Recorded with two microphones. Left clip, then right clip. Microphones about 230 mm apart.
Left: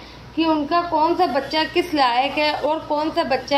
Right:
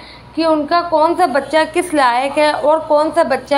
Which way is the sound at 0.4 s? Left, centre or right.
Right.